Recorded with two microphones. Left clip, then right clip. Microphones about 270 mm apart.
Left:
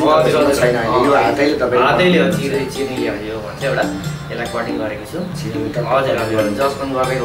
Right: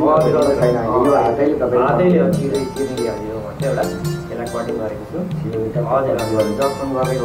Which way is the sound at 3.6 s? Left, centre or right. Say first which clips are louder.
Left 2 dB; centre.